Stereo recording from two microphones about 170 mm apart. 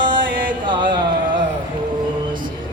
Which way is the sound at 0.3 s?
55° right (ahead or behind).